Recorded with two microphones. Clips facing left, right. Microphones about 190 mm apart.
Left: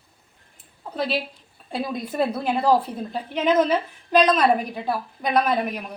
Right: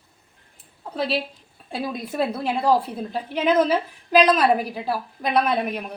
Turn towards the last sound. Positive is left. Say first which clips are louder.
# even
turn(degrees=0)  # may be behind; listen again after turning